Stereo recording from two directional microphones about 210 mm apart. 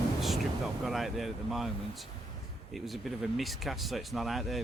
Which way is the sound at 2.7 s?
Centre (ahead or behind).